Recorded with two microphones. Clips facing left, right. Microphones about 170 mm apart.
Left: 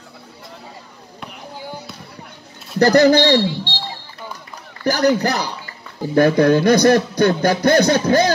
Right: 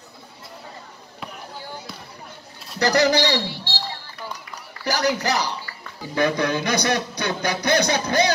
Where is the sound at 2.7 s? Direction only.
50° left (ahead or behind).